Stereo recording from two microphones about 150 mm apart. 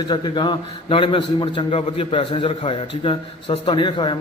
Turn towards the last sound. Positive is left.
turn(degrees=30)  # may be behind; listen again after turning